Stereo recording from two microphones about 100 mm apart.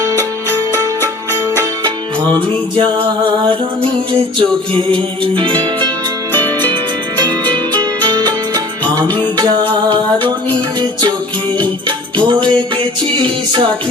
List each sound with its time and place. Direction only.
0.7 s music: 25° left (ahead or behind)
2.7 s music: 50° right (ahead or behind)
6.3 s music: 20° left (ahead or behind)
7.7 s music: 45° right (ahead or behind)
11.6 s music: 50° right (ahead or behind)